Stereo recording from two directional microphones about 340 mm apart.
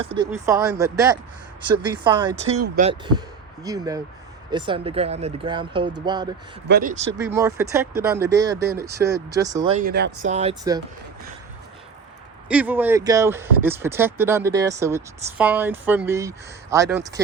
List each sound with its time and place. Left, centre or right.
0.1 s speech: centre
6.7 s speech: right
7.3 s speech: centre
9.7 s speech: right; by 10.8 s centre
12.5 s speech: centre